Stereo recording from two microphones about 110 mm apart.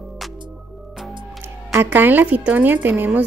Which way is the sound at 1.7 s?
20° right (ahead or behind).